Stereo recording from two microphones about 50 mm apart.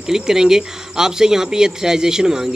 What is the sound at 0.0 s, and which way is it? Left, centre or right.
A man's voice, centre.